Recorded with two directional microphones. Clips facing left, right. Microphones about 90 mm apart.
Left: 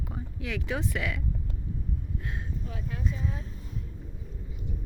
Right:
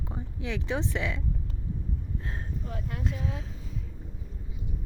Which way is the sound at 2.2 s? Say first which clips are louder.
Even; 35° right (ahead or behind).